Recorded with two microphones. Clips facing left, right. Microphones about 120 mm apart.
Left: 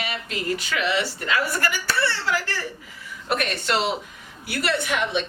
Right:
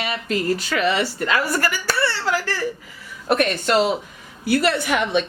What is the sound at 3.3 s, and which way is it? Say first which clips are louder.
A woman's voice: right 6 dB; 40° right (ahead or behind).